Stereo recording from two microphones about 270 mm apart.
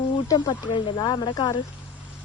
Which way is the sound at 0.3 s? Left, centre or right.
Centre.